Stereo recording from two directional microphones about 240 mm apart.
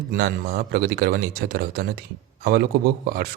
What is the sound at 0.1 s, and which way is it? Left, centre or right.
A man's voice, right.